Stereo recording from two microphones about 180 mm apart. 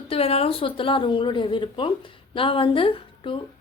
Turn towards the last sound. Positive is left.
turn(degrees=30)  # may be behind; listen again after turning